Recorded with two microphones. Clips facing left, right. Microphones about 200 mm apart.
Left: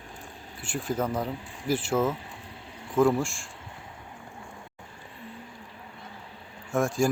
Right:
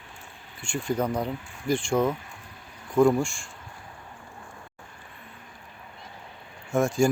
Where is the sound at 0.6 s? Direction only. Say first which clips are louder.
Right 2 dB; 5° left (ahead or behind).